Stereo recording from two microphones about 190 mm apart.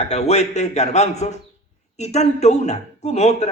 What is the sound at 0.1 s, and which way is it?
A man's voice, 35° left (ahead or behind).